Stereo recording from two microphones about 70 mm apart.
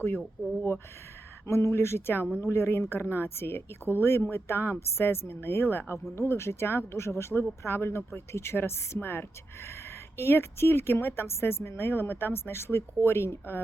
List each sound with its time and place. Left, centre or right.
1.5 s a woman's voice: left